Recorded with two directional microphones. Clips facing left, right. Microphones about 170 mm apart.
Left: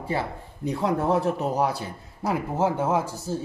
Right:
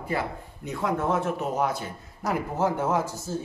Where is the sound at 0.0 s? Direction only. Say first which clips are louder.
Left 1 dB; 30° left (ahead or behind).